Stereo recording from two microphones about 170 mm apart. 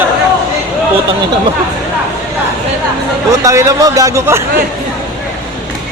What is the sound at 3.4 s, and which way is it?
Speech, 20° right (ahead or behind).